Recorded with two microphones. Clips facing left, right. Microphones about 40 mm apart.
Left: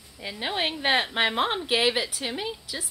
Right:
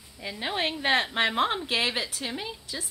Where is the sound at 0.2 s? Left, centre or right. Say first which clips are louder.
Left 1 dB; centre.